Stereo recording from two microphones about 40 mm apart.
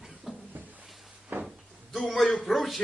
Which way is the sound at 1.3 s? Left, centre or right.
Right.